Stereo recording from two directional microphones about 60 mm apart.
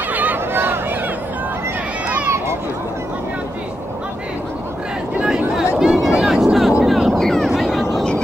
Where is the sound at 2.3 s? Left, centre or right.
Right.